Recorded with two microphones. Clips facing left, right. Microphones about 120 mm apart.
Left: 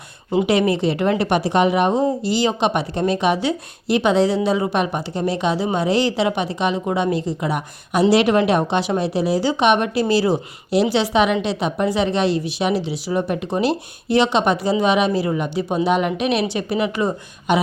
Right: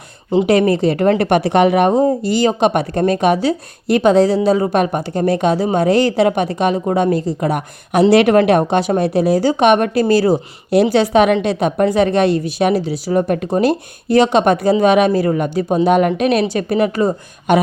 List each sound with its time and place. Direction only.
0.4 s a woman's voice: 45° right (ahead or behind)